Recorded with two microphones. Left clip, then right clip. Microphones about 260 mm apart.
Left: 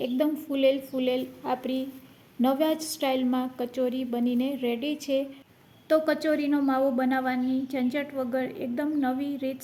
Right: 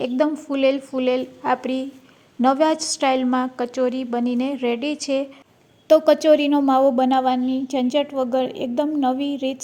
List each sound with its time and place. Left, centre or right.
0.0 s a woman's voice: centre